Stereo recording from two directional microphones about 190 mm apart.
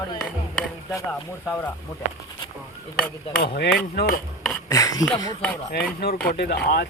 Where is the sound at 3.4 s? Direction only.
50° left (ahead or behind).